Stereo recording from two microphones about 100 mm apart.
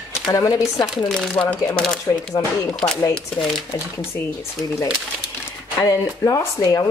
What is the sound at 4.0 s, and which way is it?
Speech, 25° left (ahead or behind).